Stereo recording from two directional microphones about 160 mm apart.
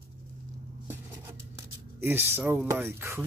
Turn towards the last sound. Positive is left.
turn(degrees=-15)  # may be behind; listen again after turning